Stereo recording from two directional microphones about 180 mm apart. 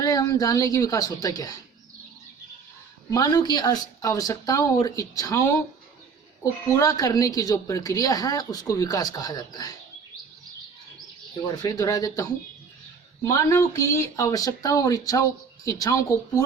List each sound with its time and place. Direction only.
0.0 s speech: 20° left (ahead or behind)
3.1 s speech: 20° left (ahead or behind)
6.7 s speech: 20° left (ahead or behind)
11.4 s speech: 20° left (ahead or behind)